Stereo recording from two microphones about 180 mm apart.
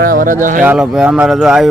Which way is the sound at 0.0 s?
50° right (ahead or behind).